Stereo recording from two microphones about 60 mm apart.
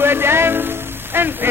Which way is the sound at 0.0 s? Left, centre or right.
Right.